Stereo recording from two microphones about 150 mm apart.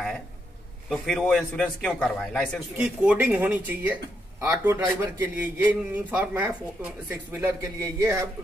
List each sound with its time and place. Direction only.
0.8 s a man's voice: 5° left (ahead or behind)
2.8 s a man's voice: 10° right (ahead or behind)
7.8 s speech: 20° right (ahead or behind)